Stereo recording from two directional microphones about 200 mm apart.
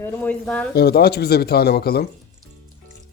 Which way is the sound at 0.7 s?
50° left (ahead or behind).